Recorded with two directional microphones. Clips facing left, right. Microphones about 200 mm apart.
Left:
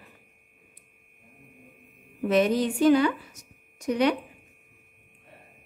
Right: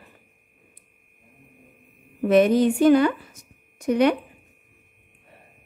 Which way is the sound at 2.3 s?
55° right (ahead or behind).